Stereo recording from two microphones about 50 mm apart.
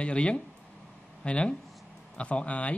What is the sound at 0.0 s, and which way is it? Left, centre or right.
Speech, left.